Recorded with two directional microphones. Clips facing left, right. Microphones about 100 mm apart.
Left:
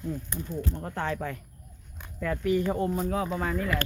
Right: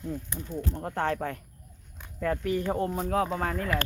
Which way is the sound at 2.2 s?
40° right (ahead or behind).